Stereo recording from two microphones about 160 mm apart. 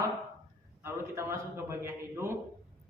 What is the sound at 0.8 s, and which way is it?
A man's voice, 15° right (ahead or behind).